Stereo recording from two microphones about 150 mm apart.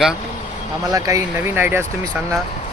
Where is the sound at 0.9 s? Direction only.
20° right (ahead or behind).